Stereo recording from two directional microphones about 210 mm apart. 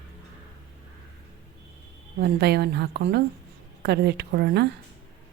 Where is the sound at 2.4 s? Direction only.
50° right (ahead or behind).